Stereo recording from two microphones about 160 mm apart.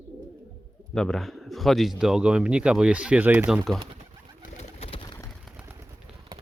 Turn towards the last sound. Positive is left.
turn(degrees=30)  # may be behind; listen again after turning